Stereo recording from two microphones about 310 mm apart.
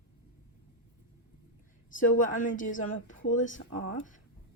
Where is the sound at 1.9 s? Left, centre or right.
Left.